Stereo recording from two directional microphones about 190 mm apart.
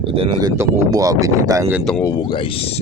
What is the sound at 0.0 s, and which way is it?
Speech, 30° right (ahead or behind).